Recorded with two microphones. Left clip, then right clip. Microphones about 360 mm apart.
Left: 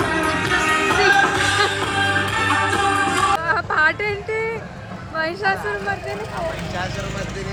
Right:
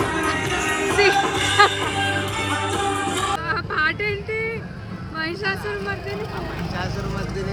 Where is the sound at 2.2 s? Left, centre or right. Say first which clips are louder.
Left 5 dB; centre.